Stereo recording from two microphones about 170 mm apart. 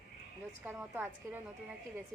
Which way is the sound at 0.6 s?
10° right (ahead or behind).